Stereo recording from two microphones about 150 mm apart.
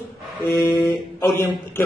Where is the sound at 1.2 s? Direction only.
20° left (ahead or behind).